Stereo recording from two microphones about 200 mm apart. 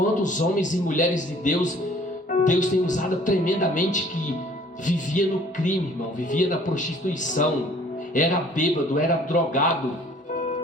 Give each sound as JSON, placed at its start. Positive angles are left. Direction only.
{"t": 0.2, "sound": "a man's voice", "side_deg": 40}